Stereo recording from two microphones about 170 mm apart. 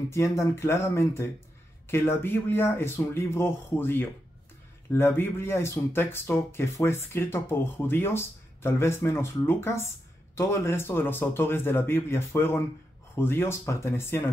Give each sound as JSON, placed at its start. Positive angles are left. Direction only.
{"t": 0.1, "sound": "speech", "side_deg": 15}